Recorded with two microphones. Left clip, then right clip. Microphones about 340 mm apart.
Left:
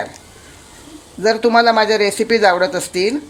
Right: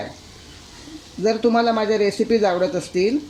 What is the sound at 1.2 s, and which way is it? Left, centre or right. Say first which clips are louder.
Speech: left 6 dB; left.